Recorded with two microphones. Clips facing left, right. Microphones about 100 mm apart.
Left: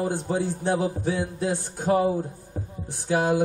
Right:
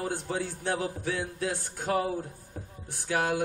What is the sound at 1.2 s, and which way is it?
Music, 35° left (ahead or behind).